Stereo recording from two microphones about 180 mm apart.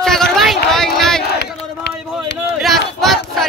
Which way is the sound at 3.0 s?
Centre (ahead or behind).